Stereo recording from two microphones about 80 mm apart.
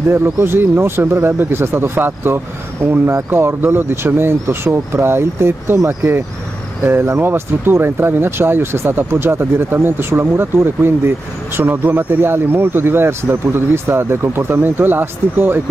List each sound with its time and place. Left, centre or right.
0.1 s speech: right